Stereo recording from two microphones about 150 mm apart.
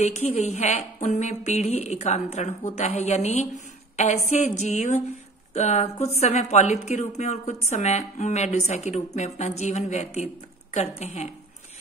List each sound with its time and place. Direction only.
0.0 s a woman's voice: 45° left (ahead or behind)